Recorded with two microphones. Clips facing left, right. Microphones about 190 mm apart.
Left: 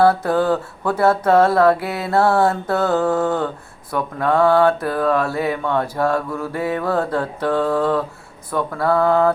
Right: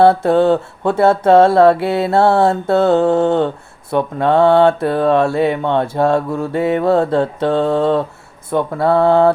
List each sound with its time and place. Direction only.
0.0 s speech: 25° right (ahead or behind)